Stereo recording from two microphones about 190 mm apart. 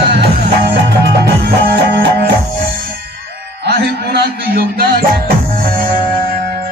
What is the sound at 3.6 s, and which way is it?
Music, 60° right (ahead or behind).